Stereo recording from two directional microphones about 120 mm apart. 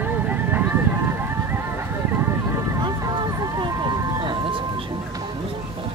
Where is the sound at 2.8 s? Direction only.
35° right (ahead or behind).